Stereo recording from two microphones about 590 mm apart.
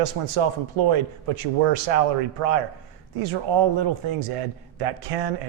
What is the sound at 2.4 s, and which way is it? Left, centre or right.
Speech, right.